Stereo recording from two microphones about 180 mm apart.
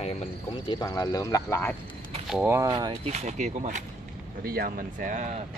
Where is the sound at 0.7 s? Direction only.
20° left (ahead or behind).